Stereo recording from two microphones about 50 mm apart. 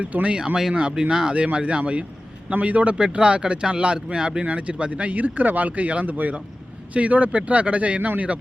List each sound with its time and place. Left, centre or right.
0.0 s speech: right
0.3 s speech: centre
1.5 s speech: right